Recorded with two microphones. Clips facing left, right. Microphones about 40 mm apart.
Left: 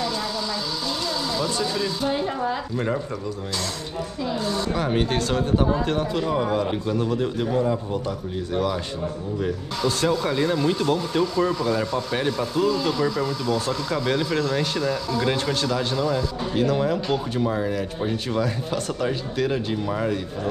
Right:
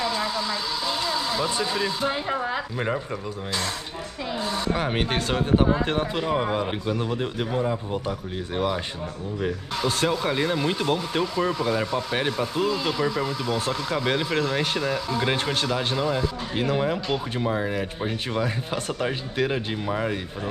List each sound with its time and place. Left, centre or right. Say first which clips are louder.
0.0 s speech: right 1 dB; centre
4.2 s speech: left 2 dB; right
9.4 s speech: left 1 dB; right